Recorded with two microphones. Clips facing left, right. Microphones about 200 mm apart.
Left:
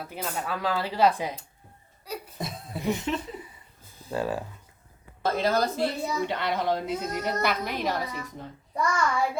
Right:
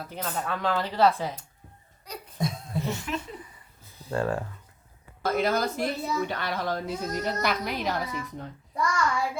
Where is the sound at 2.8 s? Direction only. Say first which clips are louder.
Left 8 dB; 15° left (ahead or behind).